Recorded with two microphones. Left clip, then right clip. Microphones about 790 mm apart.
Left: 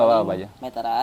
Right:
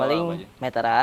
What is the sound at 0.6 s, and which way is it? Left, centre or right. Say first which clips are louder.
Speech: right 5 dB; right.